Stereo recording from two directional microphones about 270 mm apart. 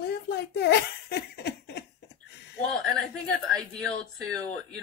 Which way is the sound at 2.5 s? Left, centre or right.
Centre.